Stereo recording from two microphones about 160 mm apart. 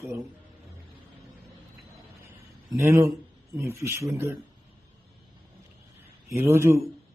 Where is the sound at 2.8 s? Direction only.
15° right (ahead or behind).